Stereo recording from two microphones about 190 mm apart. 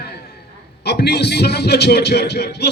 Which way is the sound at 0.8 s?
60° left (ahead or behind).